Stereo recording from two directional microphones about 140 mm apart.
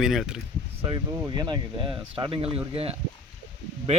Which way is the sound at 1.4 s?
35° right (ahead or behind).